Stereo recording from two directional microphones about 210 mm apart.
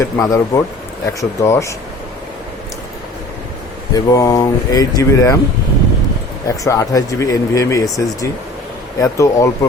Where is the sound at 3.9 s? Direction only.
15° left (ahead or behind).